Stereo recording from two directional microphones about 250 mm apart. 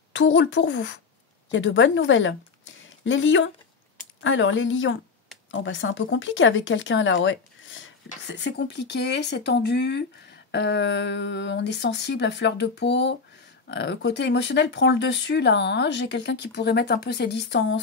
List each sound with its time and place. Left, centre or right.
0.1 s speech: left